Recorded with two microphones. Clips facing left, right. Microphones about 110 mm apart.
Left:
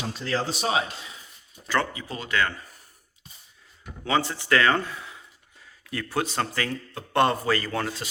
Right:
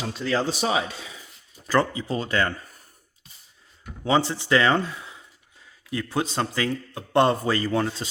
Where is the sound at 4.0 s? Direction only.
30° right (ahead or behind).